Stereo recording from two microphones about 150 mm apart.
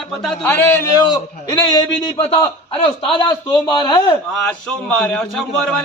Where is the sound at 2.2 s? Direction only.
45° left (ahead or behind).